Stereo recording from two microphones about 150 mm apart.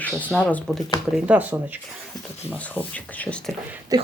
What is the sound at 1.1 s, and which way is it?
Speech, 5° right (ahead or behind).